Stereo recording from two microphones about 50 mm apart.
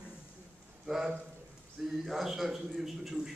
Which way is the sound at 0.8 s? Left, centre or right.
Centre.